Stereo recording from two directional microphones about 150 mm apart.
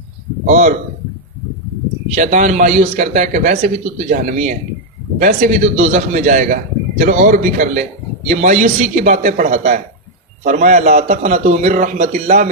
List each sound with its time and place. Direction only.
0.5 s a man's voice: 55° right (ahead or behind)
2.1 s a man's voice: 55° right (ahead or behind)